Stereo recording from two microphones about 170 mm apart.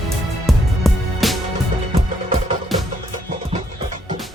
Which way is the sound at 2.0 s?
35° right (ahead or behind).